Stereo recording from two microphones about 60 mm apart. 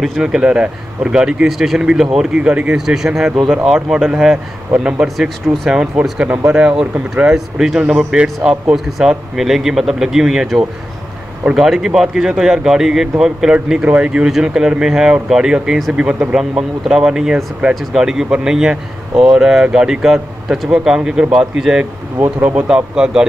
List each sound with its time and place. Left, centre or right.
0.2 s speech: centre
2.8 s speech: centre
5.0 s speech: centre
5.7 s speech: centre
11.5 s speech: centre
22.2 s speech: right
22.9 s speech: centre